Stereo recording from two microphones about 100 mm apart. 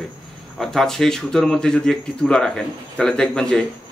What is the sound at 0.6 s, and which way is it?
Speech, 5° left (ahead or behind).